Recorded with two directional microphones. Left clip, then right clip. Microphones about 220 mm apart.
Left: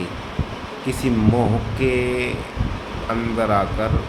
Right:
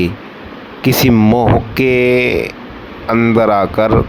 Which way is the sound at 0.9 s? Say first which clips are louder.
Right 10 dB; 40° right (ahead or behind).